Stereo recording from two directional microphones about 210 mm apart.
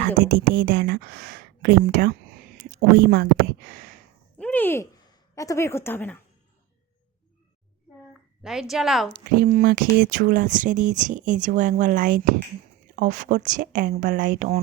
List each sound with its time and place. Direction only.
0.3 s speech: 45° right (ahead or behind)
4.4 s a woman's voice: 5° left (ahead or behind)
8.4 s a woman's voice: centre (ahead or behind)
9.1 s speech: 45° right (ahead or behind)